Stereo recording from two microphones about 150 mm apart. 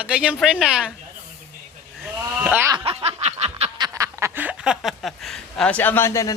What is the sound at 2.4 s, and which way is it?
Speech, 15° right (ahead or behind).